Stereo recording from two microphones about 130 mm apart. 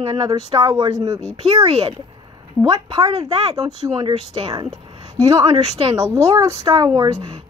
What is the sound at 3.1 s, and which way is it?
Speech, 50° right (ahead or behind).